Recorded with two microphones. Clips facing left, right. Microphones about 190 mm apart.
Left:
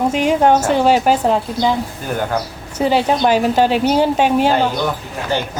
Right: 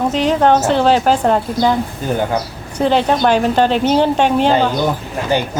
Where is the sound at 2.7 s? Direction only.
5° left (ahead or behind).